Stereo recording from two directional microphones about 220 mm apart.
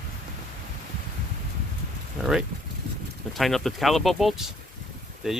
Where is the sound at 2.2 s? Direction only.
Centre (ahead or behind).